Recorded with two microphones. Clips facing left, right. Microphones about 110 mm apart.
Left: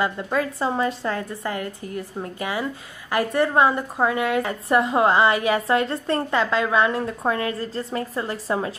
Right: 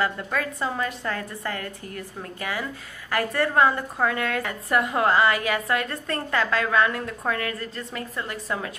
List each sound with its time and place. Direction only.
0.0 s a woman's voice: 20° left (ahead or behind)